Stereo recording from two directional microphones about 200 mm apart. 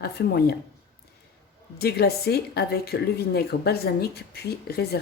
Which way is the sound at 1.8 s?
50° left (ahead or behind).